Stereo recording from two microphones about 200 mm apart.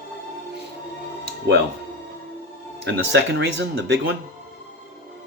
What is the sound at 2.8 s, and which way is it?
Speech, 60° right (ahead or behind).